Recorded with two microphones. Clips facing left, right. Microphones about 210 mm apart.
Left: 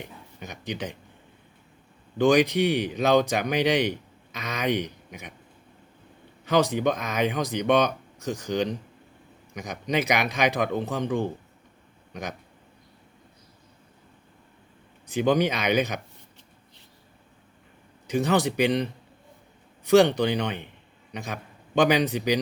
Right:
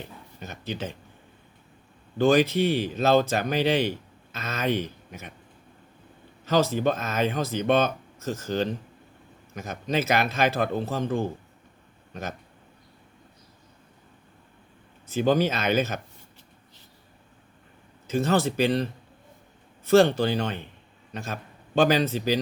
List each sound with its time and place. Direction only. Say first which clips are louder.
0.0 s a sound: even; 15° left (ahead or behind)
2.1 s speech: even; 15° left (ahead or behind)
6.4 s speech: even; 15° left (ahead or behind)
15.0 s speech: even; 15° left (ahead or behind)
18.1 s a man's voice: even; 15° left (ahead or behind)